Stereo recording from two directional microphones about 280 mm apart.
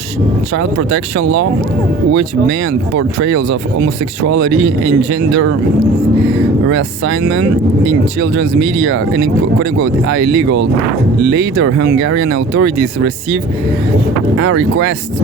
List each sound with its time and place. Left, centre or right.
0.5 s speech: right
6.7 s speech: right
14.3 s speech: right